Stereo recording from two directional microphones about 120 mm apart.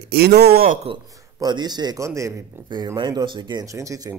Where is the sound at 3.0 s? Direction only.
35° right (ahead or behind).